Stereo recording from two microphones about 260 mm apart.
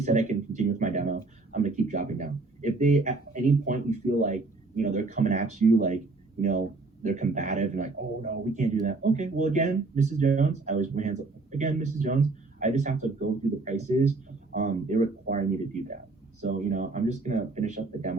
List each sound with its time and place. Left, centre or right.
0.0 s speech: right